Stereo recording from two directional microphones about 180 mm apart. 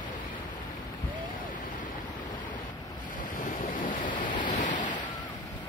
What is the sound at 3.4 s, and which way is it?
Waves, 45° left (ahead or behind).